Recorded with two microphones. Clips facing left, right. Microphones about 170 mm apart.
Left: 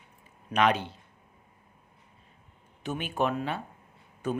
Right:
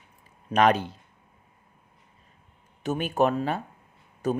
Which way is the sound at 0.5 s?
40° right (ahead or behind).